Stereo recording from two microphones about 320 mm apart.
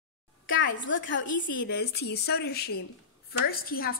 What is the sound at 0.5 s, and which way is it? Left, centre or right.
A woman's voice, left.